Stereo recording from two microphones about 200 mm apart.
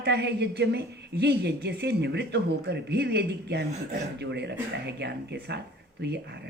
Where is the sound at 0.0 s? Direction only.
60° right (ahead or behind).